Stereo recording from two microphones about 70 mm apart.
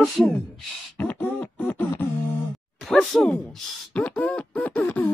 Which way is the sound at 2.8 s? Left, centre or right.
Centre.